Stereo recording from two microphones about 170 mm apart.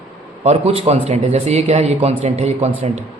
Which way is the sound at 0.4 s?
35° right (ahead or behind).